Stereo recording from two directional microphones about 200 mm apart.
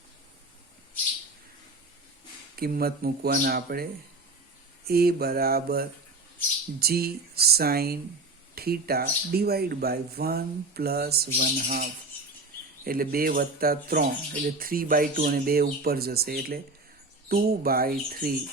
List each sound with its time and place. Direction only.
2.6 s speech: 50° right (ahead or behind)
4.9 s speech: 50° right (ahead or behind)